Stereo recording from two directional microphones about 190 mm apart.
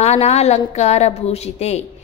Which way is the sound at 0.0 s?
35° left (ahead or behind).